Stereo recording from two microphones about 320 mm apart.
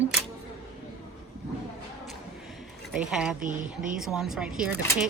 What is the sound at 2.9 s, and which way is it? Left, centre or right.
Speech, centre.